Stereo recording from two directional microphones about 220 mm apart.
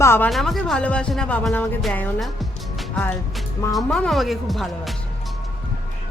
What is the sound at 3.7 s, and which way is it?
Speech, 5° left (ahead or behind).